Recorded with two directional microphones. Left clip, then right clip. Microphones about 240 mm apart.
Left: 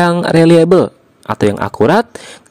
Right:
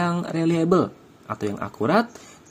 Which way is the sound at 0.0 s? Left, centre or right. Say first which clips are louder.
Left 14 dB; left.